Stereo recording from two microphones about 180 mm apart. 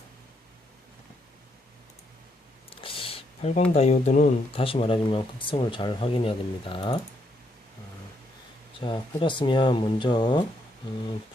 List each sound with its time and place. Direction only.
2.6 s speech: 30° left (ahead or behind)
8.8 s speech: 25° left (ahead or behind)